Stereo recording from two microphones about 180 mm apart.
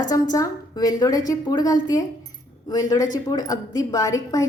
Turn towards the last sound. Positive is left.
turn(degrees=20)  # may be behind; listen again after turning